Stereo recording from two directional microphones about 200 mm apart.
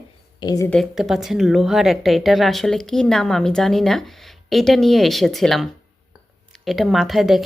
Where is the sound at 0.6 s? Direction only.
Centre (ahead or behind).